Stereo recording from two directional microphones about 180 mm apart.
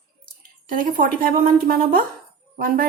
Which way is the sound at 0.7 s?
50° right (ahead or behind).